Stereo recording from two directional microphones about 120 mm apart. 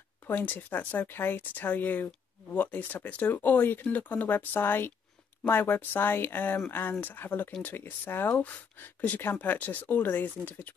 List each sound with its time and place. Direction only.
0.3 s speech: 15° left (ahead or behind)